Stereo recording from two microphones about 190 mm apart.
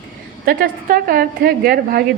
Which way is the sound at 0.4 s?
50° right (ahead or behind).